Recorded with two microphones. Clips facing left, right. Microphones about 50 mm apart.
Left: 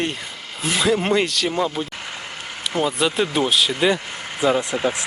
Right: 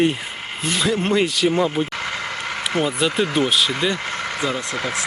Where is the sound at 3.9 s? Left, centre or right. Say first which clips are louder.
Right 4 dB; right.